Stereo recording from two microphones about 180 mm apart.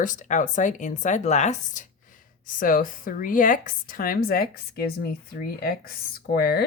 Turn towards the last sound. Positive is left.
turn(degrees=60)  # may be behind; listen again after turning